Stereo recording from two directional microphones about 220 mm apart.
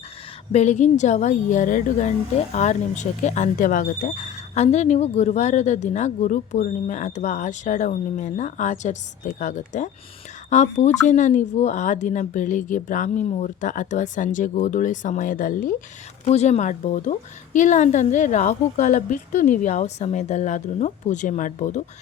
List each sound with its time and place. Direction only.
0.5 s speech: 30° left (ahead or behind)